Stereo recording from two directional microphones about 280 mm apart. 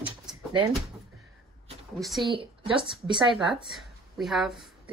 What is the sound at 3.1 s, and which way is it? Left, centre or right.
Speech, centre.